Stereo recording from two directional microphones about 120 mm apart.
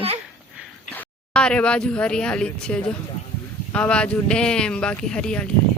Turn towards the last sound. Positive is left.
turn(degrees=10)  # may be behind; listen again after turning